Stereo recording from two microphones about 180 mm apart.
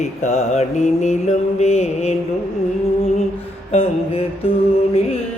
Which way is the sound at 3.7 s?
35° left (ahead or behind).